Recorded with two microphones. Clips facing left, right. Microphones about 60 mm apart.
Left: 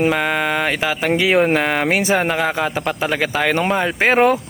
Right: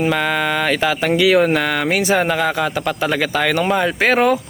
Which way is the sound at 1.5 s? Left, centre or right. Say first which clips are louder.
Left 1 dB; centre.